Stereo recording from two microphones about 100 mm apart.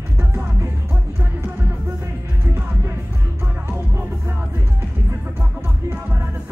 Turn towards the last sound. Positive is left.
turn(degrees=-20)  # may be behind; listen again after turning